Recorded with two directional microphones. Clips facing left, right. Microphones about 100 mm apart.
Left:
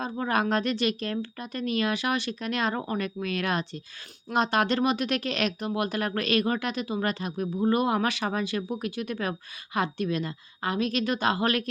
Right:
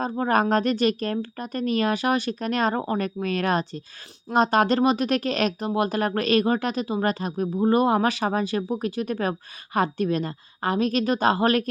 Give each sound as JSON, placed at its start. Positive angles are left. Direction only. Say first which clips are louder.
{"t": 0.0, "sound": "speech", "louder": "right 5 dB", "side_deg": -40}